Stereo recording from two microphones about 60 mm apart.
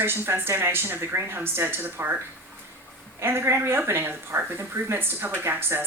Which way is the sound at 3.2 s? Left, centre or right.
Right.